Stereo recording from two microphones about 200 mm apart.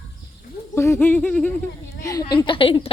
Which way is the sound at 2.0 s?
15° left (ahead or behind).